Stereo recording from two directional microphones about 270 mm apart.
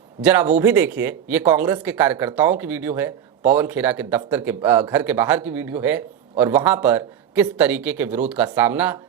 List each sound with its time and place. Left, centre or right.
0.2 s speech: centre